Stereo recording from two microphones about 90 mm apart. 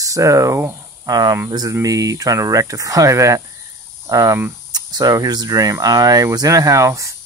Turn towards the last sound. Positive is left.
turn(degrees=-35)  # may be behind; listen again after turning